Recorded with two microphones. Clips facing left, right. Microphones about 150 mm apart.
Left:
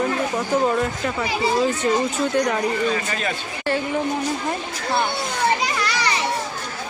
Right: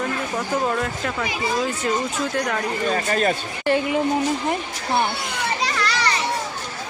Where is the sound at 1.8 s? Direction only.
Centre (ahead or behind).